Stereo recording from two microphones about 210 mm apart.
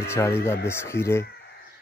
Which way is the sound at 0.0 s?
10° left (ahead or behind).